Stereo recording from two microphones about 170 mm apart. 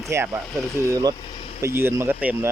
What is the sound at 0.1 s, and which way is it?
Speech, 15° right (ahead or behind).